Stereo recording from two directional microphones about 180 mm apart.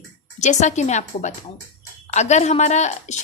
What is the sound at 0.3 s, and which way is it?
A woman's voice, 40° left (ahead or behind).